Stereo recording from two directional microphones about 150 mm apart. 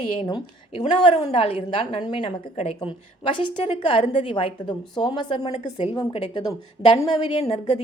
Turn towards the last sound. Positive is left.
turn(degrees=45)  # may be behind; listen again after turning